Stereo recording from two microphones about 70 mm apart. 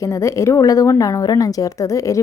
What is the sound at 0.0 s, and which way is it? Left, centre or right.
A woman's voice, left.